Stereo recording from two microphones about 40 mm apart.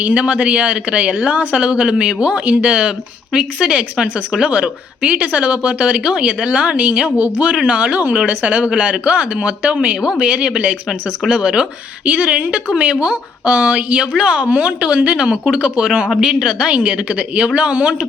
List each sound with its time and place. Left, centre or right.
0.0 s a woman's voice: right
6.1 s speech: right
6.5 s a woman's voice: right
7.2 s speech: right
7.7 s a woman's voice: right
12.0 s a woman's voice: right